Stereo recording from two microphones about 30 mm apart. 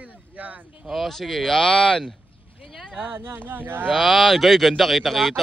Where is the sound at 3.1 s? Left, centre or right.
Right.